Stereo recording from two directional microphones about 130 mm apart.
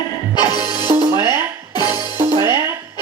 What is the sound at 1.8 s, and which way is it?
Music, 20° right (ahead or behind).